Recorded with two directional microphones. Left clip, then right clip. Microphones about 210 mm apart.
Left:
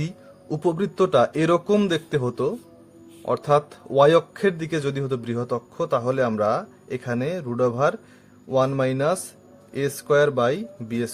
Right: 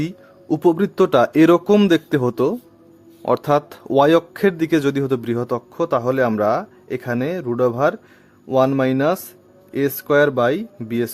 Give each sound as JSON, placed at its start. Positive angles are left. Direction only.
{"t": 0.0, "sound": "speech", "side_deg": -30}